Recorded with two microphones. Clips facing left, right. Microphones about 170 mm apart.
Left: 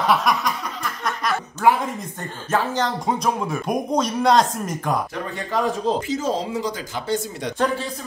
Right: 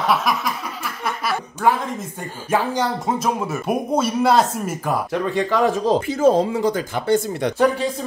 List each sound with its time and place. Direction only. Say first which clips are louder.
0.0 s a sound: even; centre (ahead or behind)
2.5 s speech: right 2 dB; 10° right (ahead or behind)
5.3 s speech: right 5 dB; 90° right
6.0 s speech: right 7 dB; 55° right (ahead or behind)